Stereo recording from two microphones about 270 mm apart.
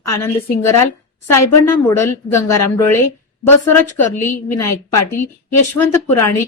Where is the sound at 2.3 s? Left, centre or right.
Centre.